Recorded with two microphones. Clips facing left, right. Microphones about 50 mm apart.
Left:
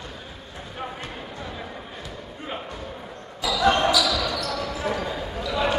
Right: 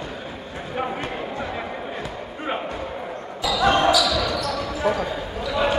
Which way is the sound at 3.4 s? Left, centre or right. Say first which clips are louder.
Right 2 dB; centre.